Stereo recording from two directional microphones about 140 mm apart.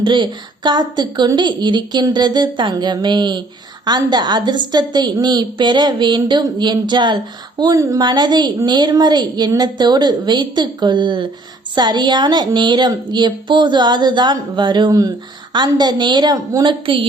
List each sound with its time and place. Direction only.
0.0 s a woman's voice: 35° right (ahead or behind)
16.8 s a woman's voice: 35° right (ahead or behind)